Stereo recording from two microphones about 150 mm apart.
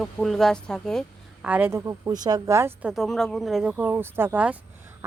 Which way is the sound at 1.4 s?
10° right (ahead or behind).